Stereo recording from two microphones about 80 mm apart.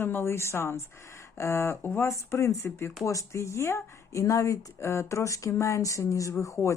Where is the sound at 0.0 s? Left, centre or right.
Left.